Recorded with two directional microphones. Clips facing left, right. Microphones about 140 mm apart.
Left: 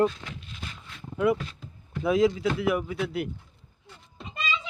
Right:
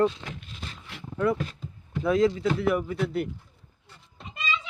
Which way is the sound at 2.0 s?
5° left (ahead or behind).